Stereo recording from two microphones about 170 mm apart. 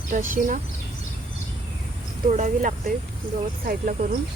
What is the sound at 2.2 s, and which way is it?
Speech, 45° right (ahead or behind).